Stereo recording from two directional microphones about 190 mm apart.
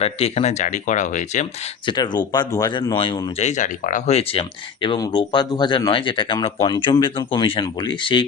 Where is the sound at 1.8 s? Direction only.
25° left (ahead or behind).